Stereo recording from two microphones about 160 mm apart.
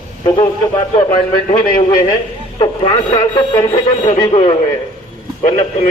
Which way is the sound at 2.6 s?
30° left (ahead or behind).